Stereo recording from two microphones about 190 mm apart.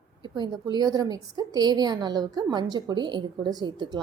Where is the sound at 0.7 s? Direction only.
20° right (ahead or behind).